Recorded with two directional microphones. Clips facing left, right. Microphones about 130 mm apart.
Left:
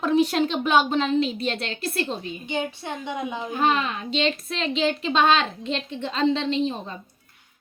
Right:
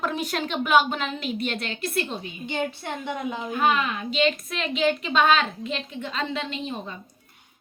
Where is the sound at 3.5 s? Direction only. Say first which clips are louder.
Even; 30° left (ahead or behind).